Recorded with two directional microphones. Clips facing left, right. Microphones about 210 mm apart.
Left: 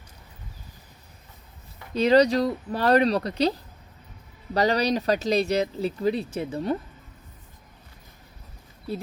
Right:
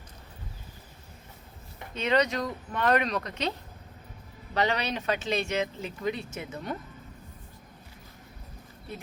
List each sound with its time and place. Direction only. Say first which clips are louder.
1.9 s speech: left 8 dB; 35° left (ahead or behind)